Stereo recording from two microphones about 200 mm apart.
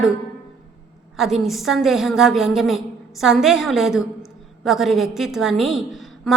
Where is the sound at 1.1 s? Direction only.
Centre (ahead or behind).